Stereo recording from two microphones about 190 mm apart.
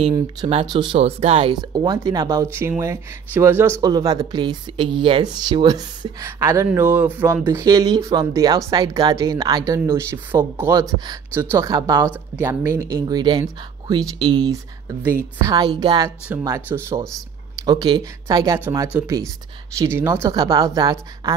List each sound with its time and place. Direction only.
0.1 s speech: 25° right (ahead or behind)
10.8 s speech: 20° right (ahead or behind)
16.4 s speech: 15° right (ahead or behind)
17.6 s speech: 25° right (ahead or behind)